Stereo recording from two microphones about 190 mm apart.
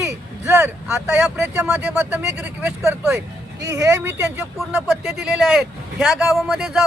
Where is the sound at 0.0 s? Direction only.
15° right (ahead or behind).